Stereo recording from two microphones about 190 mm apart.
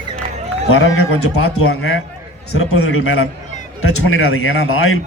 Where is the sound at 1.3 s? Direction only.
90° left.